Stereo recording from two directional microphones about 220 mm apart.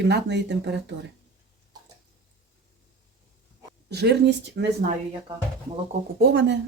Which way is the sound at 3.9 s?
50° right (ahead or behind).